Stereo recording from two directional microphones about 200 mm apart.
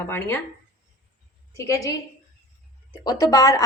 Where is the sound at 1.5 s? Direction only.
15° left (ahead or behind).